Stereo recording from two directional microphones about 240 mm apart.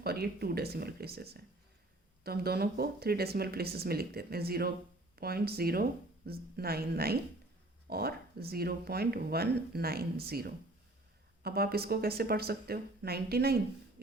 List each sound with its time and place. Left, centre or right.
0.0 s speech: right